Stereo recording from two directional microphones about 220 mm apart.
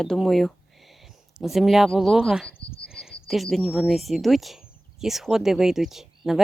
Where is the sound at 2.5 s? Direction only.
25° left (ahead or behind).